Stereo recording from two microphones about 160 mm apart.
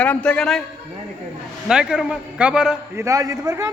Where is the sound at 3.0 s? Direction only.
20° right (ahead or behind).